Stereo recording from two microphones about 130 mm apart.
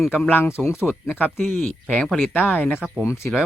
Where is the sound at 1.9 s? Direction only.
10° left (ahead or behind).